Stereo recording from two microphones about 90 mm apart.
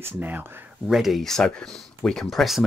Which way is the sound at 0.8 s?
5° right (ahead or behind).